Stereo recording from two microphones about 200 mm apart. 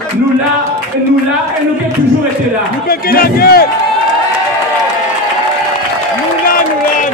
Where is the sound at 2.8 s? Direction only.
50° left (ahead or behind).